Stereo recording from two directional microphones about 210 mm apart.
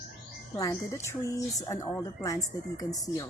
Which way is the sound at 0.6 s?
15° left (ahead or behind).